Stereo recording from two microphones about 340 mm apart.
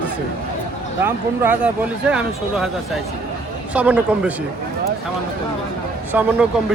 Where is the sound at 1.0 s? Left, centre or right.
Centre.